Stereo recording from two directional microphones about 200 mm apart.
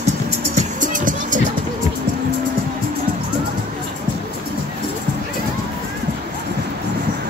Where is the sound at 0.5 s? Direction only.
40° right (ahead or behind).